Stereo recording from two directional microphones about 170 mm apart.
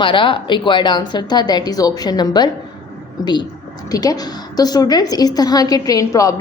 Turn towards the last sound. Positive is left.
turn(degrees=20)  # may be behind; listen again after turning